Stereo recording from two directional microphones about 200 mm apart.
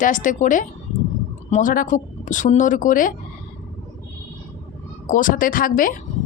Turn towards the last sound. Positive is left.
turn(degrees=45)  # may be behind; listen again after turning